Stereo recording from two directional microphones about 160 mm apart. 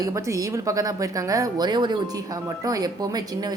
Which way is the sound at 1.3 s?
25° right (ahead or behind).